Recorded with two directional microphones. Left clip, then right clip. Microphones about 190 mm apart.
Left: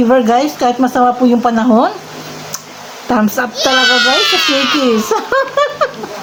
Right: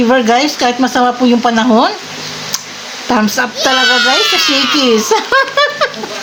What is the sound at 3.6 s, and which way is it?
A child's voice, centre (ahead or behind).